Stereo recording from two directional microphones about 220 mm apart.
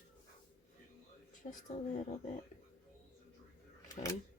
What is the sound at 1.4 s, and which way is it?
Speech, 35° left (ahead or behind).